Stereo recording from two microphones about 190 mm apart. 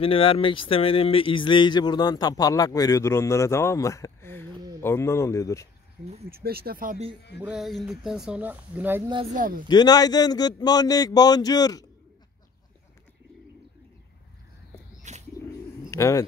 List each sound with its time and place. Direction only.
0.0 s speech: 30° left (ahead or behind)
6.0 s speech: 55° right (ahead or behind)
7.3 s speech: 5° right (ahead or behind)
9.3 s speech: 45° right (ahead or behind)
9.7 s speech: 20° left (ahead or behind)
15.1 s bird: 40° right (ahead or behind)
15.9 s speech: 15° left (ahead or behind)